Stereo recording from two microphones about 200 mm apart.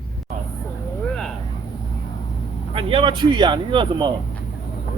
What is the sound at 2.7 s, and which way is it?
Speech, 25° right (ahead or behind).